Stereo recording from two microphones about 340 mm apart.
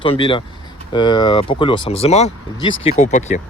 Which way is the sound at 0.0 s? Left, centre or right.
Centre.